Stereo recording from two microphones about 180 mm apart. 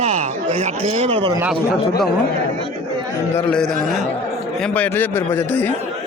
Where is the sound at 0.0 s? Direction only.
35° right (ahead or behind).